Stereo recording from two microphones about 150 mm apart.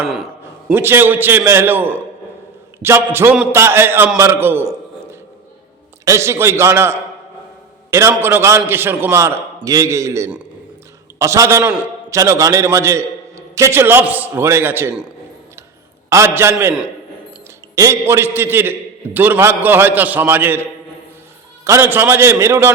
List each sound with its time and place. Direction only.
0.0 s a man's voice: centre (ahead or behind)
0.7 s a man's voice: 15° right (ahead or behind)
6.1 s a man's voice: 20° right (ahead or behind)
16.0 s a man's voice: 20° right (ahead or behind)
17.7 s a man's voice: 20° right (ahead or behind)